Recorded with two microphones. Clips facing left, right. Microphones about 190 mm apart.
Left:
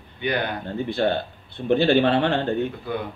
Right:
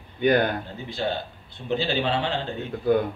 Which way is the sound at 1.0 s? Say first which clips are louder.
Left 4 dB; 60° left (ahead or behind).